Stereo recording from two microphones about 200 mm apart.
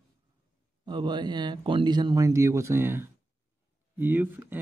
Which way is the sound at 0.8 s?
20° right (ahead or behind).